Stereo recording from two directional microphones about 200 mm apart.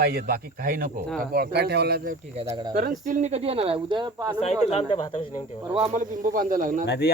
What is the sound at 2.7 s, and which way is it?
Speech, 45° right (ahead or behind).